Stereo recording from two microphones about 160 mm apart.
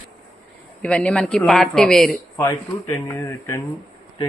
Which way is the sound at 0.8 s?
5° left (ahead or behind).